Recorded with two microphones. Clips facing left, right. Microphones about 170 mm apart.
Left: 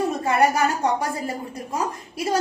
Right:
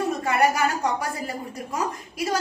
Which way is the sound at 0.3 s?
30° left (ahead or behind).